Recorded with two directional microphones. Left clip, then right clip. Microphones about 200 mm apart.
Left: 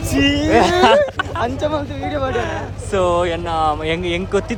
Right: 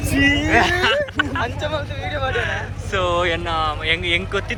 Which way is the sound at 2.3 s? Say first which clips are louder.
Left 1 dB; 30° left (ahead or behind).